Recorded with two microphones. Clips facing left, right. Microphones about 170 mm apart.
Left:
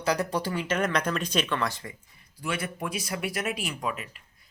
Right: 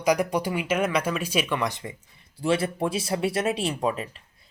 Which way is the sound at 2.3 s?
30° right (ahead or behind).